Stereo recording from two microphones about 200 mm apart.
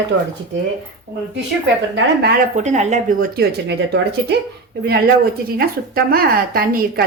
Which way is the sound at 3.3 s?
55° right (ahead or behind).